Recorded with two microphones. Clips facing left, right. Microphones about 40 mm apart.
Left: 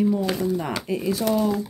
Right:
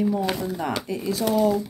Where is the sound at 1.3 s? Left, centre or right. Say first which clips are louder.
Right 3 dB; centre.